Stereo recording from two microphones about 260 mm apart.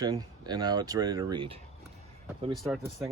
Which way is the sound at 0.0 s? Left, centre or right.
Centre.